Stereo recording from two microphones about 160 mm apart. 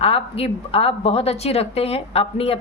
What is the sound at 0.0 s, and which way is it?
A woman's voice, 40° left (ahead or behind).